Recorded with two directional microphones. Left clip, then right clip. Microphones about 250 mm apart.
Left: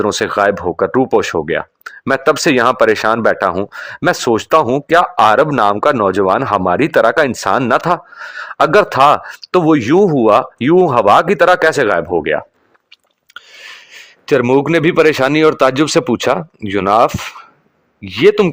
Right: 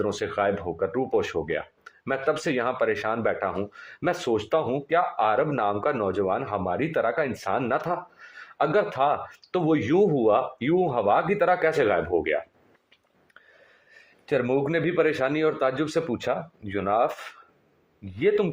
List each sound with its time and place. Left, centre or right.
0.0 s speech: left
14.3 s speech: left